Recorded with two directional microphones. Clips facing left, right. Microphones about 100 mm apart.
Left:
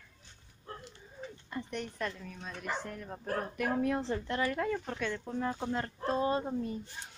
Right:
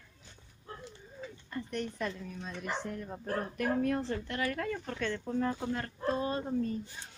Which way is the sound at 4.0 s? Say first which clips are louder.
Left 2 dB; 25° left (ahead or behind).